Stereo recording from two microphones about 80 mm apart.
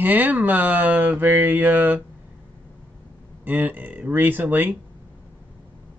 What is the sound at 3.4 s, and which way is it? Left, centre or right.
Speech, right.